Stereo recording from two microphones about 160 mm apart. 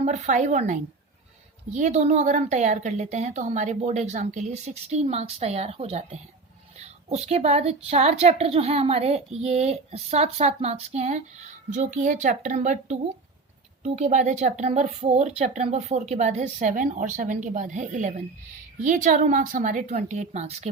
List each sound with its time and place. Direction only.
0.0 s a woman's voice: 50° right (ahead or behind)